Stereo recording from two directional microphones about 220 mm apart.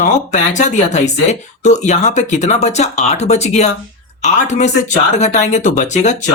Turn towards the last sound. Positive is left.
turn(degrees=30)  # may be behind; listen again after turning